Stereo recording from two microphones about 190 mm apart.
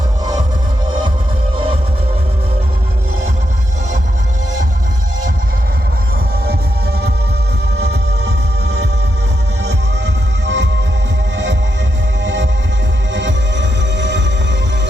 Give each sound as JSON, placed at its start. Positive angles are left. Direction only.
{"t": 7.8, "sound": "music", "side_deg": -60}
{"t": 10.4, "sound": "music", "side_deg": -70}
{"t": 12.2, "sound": "music", "side_deg": -75}